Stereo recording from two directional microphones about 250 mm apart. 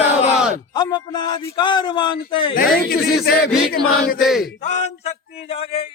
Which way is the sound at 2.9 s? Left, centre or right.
Left.